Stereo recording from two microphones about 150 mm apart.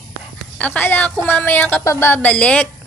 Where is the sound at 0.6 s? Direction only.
10° left (ahead or behind).